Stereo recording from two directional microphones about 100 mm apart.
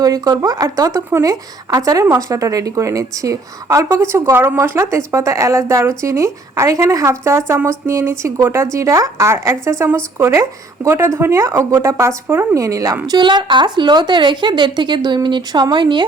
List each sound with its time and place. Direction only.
0.0 s speech: 40° right (ahead or behind); by 12.5 s 20° right (ahead or behind)
12.5 s speech: 35° right (ahead or behind)
13.1 s speech: 50° right (ahead or behind)